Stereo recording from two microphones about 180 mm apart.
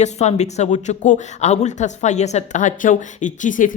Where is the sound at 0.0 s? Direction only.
40° left (ahead or behind).